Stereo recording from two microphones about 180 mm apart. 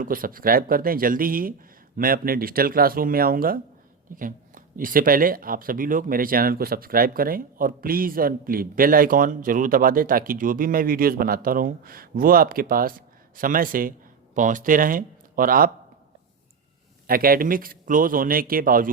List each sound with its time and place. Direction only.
0.0 s speech: 50° right (ahead or behind)
17.1 s speech: 55° right (ahead or behind)